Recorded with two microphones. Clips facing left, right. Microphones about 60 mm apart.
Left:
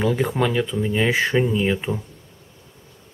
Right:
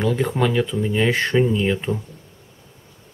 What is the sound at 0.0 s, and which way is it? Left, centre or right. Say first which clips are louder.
Speech: even; centre.